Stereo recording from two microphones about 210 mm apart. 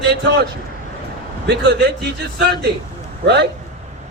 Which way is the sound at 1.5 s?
50° right (ahead or behind).